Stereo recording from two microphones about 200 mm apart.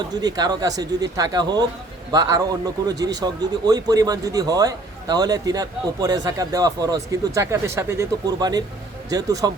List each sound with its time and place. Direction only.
0.1 s a man's voice: 20° right (ahead or behind)